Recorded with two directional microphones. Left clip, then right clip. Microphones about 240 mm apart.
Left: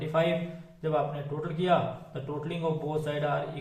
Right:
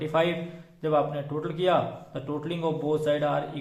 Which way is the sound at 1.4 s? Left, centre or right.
Right.